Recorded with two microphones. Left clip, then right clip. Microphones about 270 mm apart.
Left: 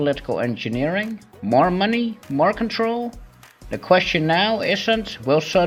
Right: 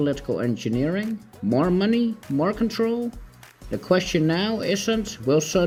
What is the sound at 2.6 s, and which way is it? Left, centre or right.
Speech, left.